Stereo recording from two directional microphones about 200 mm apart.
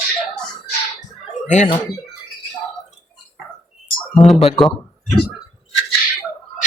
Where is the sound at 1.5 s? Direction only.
35° left (ahead or behind).